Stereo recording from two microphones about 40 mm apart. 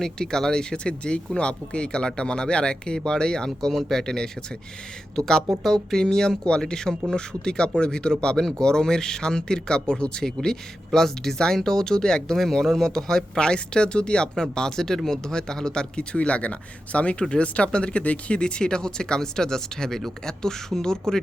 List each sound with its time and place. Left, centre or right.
0.0 s speech: centre
16.1 s speech: left; by 21.2 s centre